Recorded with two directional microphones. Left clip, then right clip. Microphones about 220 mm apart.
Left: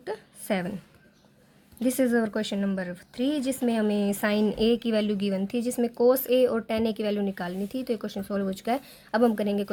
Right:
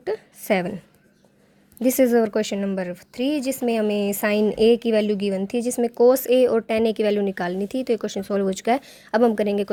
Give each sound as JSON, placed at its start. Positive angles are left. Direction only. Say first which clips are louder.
{"t": 0.0, "sound": "a woman's voice", "louder": "right 8 dB", "side_deg": -35}
{"t": 1.8, "sound": "speech", "louder": "right 7 dB", "side_deg": -30}